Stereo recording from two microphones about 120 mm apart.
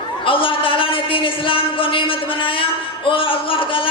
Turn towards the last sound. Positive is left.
turn(degrees=45)  # may be behind; listen again after turning